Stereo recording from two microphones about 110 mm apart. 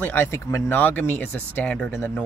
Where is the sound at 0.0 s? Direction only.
20° left (ahead or behind).